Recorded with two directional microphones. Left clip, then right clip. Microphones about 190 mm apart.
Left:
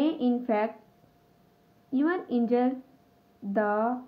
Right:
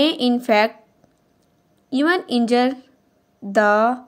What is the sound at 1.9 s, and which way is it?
A woman's voice, 55° right (ahead or behind).